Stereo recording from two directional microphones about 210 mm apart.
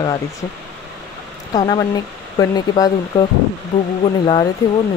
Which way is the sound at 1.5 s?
20° left (ahead or behind).